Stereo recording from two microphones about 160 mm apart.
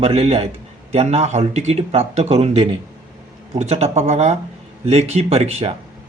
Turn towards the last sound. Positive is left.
turn(degrees=-40)  # may be behind; listen again after turning